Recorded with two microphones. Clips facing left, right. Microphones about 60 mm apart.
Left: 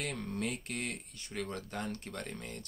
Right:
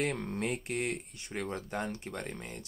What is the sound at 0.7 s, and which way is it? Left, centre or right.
Speech, centre.